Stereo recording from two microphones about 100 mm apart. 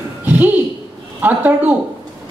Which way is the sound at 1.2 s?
15° right (ahead or behind).